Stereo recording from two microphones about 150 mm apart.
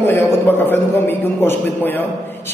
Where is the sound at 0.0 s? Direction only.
15° left (ahead or behind).